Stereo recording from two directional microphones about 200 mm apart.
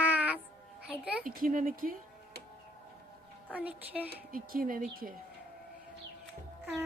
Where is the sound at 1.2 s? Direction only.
45° right (ahead or behind).